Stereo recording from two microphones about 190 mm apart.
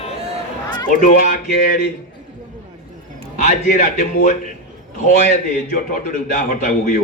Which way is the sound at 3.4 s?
40° left (ahead or behind).